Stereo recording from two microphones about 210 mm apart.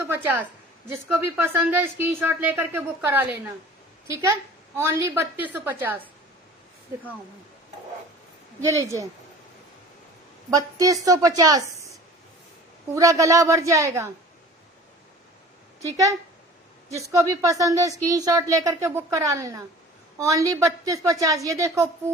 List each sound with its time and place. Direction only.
0.9 s speech: 10° right (ahead or behind)
8.6 s speech: 15° right (ahead or behind)
10.5 s speech: 15° right (ahead or behind)
12.9 s speech: 15° right (ahead or behind)
15.8 s speech: 15° right (ahead or behind)